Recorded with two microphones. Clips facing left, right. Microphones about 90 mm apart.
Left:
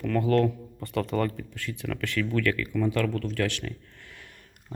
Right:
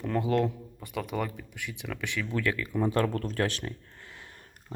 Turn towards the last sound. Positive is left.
turn(degrees=-30)  # may be behind; listen again after turning